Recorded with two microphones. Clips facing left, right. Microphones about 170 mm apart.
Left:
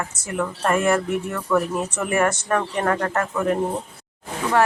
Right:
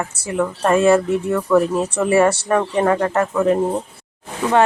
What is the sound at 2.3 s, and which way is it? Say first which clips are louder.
Speech: right 5 dB; 15° right (ahead or behind).